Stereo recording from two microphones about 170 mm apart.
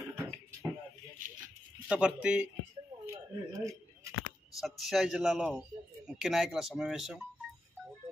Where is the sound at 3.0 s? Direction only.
15° right (ahead or behind).